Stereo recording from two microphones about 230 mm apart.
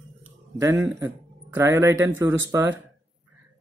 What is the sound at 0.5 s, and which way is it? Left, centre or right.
Speech, centre.